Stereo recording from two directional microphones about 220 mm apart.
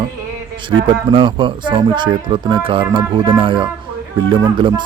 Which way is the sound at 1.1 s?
20° right (ahead or behind).